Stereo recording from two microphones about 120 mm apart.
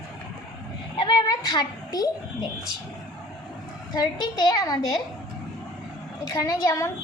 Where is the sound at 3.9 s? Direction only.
35° left (ahead or behind).